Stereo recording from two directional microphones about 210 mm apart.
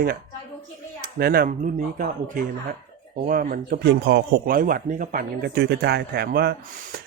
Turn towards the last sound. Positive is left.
turn(degrees=-50)  # may be behind; listen again after turning